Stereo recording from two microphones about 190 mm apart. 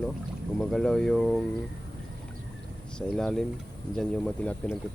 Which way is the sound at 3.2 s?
5° left (ahead or behind).